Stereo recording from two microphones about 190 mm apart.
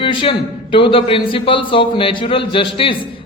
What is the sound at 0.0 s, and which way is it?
A man's voice, 25° left (ahead or behind).